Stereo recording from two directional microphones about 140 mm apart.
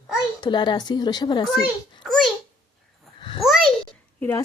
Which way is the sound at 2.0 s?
Centre (ahead or behind).